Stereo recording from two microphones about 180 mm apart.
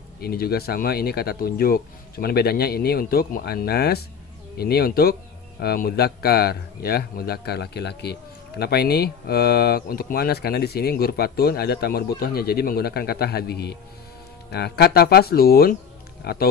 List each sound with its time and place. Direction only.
0.2 s a man's voice: 60° left (ahead or behind)